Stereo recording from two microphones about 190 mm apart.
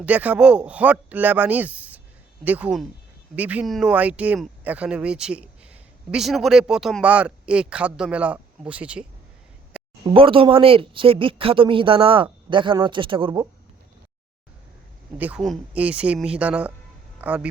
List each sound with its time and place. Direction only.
0.0 s speech: 10° right (ahead or behind)
9.7 s a sound: 5° right (ahead or behind)
10.1 s a woman's voice: 30° right (ahead or behind)
15.2 s speech: 5° right (ahead or behind)